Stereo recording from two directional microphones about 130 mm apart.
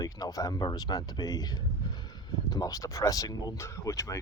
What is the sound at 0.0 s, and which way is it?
Speech, 25° left (ahead or behind).